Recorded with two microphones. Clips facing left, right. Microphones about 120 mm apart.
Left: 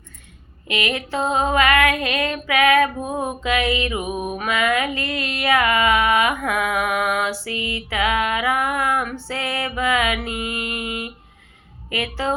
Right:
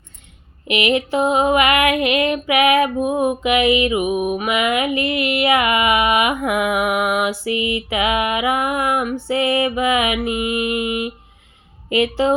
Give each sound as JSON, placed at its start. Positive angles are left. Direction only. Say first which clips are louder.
{"t": 0.7, "sound": "female singing", "louder": "right 6 dB", "side_deg": -20}
{"t": 9.2, "sound": "mantra", "louder": "right 8 dB", "side_deg": -20}
{"t": 11.9, "sound": "speech", "louder": "right 8 dB", "side_deg": -20}